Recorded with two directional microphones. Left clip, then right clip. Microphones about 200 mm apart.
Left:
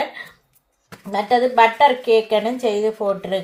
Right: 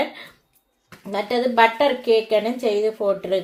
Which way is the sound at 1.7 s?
35° right (ahead or behind).